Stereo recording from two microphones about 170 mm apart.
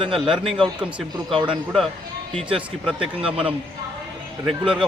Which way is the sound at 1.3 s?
30° right (ahead or behind).